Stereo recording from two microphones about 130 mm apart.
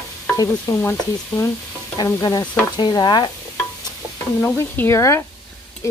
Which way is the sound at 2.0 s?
30° left (ahead or behind).